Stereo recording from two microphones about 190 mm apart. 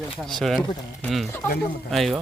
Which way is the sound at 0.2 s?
Centre (ahead or behind).